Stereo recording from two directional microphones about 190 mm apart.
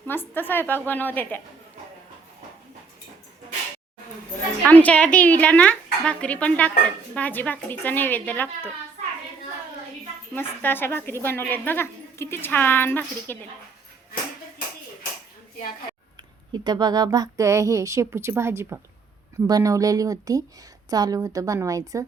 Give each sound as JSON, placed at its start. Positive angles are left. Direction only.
{"t": 0.1, "sound": "speech", "side_deg": 10}
{"t": 4.6, "sound": "speech", "side_deg": 10}
{"t": 10.3, "sound": "speech", "side_deg": 10}
{"t": 16.5, "sound": "speech", "side_deg": -20}